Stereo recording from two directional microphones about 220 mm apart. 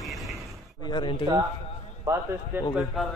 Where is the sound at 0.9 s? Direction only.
20° left (ahead or behind).